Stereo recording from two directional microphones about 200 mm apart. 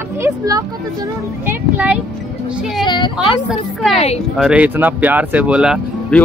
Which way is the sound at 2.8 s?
20° left (ahead or behind).